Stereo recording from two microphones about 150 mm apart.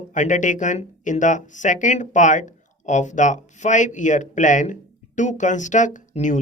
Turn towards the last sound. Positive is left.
turn(degrees=55)  # may be behind; listen again after turning